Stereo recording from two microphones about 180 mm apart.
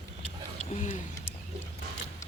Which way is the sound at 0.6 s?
45° left (ahead or behind).